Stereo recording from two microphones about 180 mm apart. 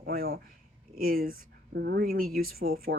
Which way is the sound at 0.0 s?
55° right (ahead or behind).